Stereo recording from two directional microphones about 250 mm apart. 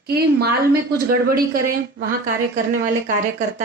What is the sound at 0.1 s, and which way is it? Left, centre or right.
Speech, right.